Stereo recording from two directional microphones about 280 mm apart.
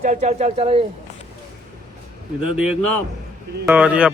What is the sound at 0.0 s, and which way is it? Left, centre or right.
Speech, right.